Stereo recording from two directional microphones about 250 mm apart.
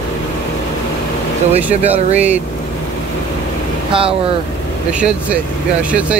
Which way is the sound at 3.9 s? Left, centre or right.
Right.